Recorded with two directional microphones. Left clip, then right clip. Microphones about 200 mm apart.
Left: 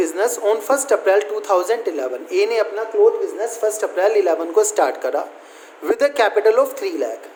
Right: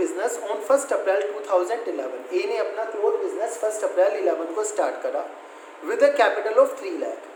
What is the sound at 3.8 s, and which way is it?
A woman's voice, 60° left (ahead or behind).